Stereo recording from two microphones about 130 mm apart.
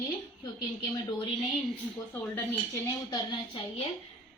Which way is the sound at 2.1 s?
15° left (ahead or behind).